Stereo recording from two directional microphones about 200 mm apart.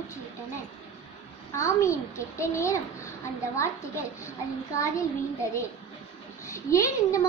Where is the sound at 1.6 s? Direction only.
15° left (ahead or behind).